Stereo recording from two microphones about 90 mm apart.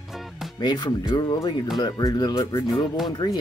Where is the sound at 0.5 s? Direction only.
50° left (ahead or behind).